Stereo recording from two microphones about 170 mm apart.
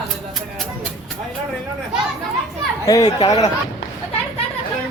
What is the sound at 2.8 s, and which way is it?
Speech, 20° left (ahead or behind).